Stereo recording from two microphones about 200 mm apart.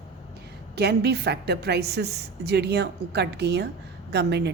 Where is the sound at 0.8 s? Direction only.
55° right (ahead or behind).